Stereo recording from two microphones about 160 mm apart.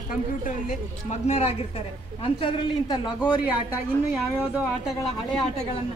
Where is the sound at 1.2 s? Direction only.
40° left (ahead or behind).